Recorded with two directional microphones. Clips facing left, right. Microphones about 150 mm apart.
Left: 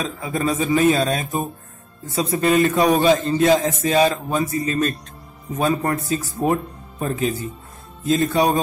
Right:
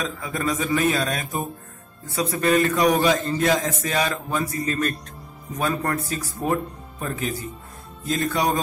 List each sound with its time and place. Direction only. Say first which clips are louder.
0.0 s a man's voice: left 3 dB; 25° left (ahead or behind)